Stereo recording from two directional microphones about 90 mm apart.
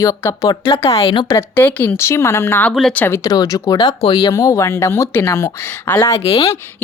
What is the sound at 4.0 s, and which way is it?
Speech, 65° left (ahead or behind).